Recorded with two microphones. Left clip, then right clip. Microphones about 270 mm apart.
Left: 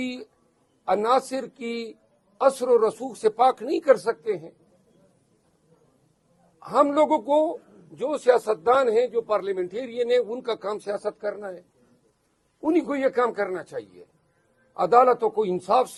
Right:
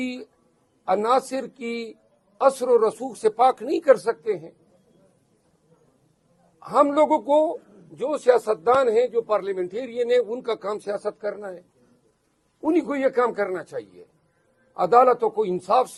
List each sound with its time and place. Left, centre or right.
1.3 s a man's voice: left
1.6 s a man's voice: left
2.4 s speech: centre
6.6 s a man's voice: centre; by 11.5 s left
12.9 s a man's voice: left
14.7 s a man's voice: left; by 16.0 s centre